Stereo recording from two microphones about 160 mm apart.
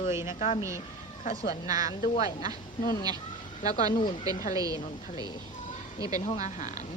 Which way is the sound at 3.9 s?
30° left (ahead or behind).